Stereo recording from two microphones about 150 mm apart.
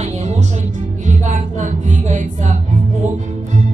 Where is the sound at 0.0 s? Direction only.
50° right (ahead or behind).